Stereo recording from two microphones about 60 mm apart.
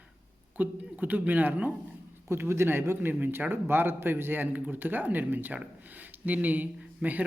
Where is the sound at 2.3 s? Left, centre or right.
Right.